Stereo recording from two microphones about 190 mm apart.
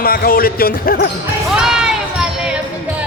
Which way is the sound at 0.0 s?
50° left (ahead or behind).